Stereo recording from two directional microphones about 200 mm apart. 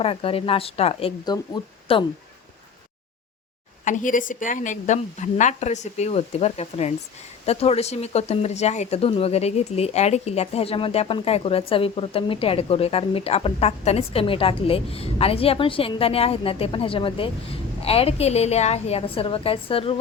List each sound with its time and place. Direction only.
0.0 s a woman's voice: 25° left (ahead or behind)
3.8 s a woman's voice: 40° left (ahead or behind)